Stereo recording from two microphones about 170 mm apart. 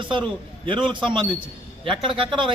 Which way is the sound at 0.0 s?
30° right (ahead or behind).